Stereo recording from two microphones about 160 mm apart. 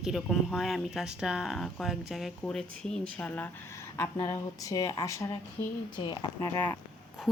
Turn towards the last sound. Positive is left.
turn(degrees=30)  # may be behind; listen again after turning